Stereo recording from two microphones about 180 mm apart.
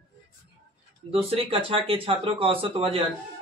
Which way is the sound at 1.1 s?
30° right (ahead or behind).